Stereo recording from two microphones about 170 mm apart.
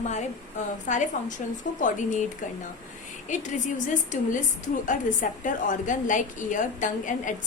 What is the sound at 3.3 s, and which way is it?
A woman's voice, 45° left (ahead or behind).